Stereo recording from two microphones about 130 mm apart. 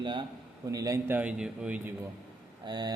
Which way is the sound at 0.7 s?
25° right (ahead or behind).